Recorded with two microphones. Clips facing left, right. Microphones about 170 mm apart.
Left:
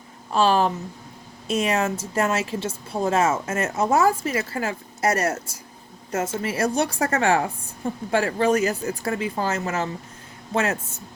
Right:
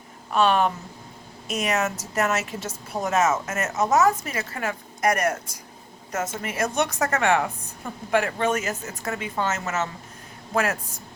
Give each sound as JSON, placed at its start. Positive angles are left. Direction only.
{"t": 0.3, "sound": "a woman's voice", "side_deg": 30}